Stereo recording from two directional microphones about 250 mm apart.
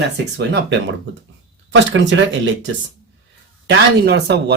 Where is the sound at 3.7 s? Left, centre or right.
Right.